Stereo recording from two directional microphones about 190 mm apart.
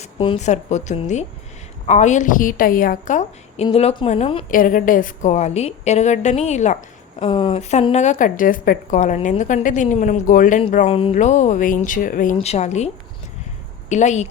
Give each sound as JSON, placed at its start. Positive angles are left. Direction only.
{"t": 0.0, "sound": "a woman's voice", "side_deg": 30}
{"t": 4.4, "sound": "a woman's voice", "side_deg": 45}
{"t": 13.9, "sound": "a woman's voice", "side_deg": 40}